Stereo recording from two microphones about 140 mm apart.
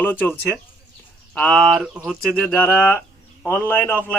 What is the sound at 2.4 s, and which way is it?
A man's voice, 10° left (ahead or behind).